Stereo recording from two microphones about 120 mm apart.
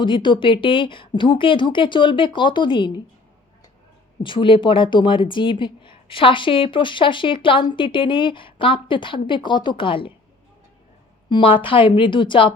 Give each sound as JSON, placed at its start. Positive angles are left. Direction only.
{"t": 0.0, "sound": "speech", "side_deg": 40}
{"t": 4.2, "sound": "speech", "side_deg": 45}
{"t": 11.3, "sound": "speech", "side_deg": 45}